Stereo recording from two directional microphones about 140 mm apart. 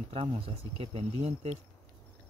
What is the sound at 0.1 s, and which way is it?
Speech, 45° right (ahead or behind).